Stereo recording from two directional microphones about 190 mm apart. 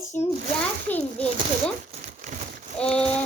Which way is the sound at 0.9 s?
10° left (ahead or behind).